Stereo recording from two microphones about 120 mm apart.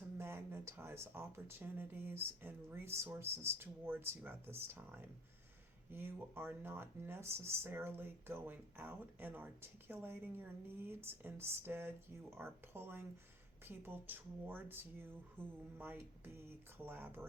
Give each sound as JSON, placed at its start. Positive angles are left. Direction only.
{"t": 0.2, "sound": "speech", "side_deg": -20}